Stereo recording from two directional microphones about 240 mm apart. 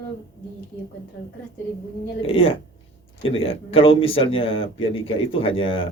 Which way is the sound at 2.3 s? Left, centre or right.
Left.